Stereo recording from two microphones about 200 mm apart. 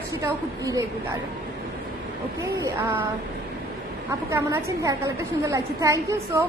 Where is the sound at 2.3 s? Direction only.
15° right (ahead or behind).